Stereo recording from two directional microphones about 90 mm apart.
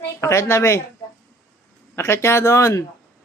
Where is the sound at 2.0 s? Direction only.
30° left (ahead or behind).